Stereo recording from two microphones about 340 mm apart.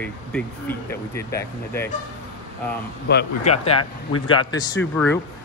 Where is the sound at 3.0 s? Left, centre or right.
Left.